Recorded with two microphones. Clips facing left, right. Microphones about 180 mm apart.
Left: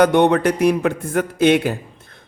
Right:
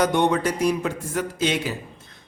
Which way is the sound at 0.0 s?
60° left (ahead or behind).